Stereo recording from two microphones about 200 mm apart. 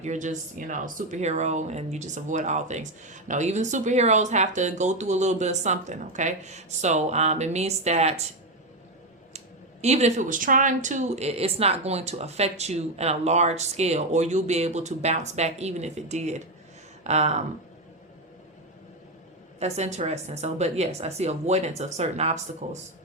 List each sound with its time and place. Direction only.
0.0 s speech: 35° right (ahead or behind)
9.8 s speech: 35° right (ahead or behind)
19.5 s speech: 35° right (ahead or behind)